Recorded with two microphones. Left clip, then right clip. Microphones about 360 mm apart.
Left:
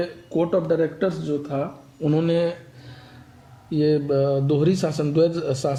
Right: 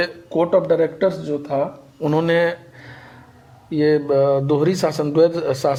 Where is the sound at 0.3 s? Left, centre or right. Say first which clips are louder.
Right 5 dB; right.